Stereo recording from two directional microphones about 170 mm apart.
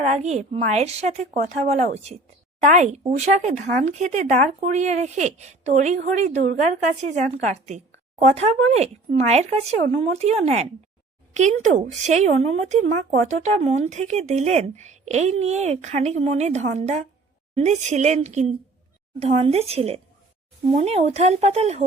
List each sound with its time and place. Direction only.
0.1 s speech: 40° right (ahead or behind)